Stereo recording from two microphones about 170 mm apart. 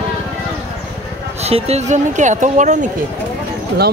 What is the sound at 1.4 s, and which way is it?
Speech, 40° right (ahead or behind).